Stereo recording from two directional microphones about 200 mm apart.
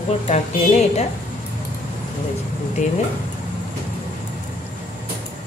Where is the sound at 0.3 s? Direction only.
35° left (ahead or behind).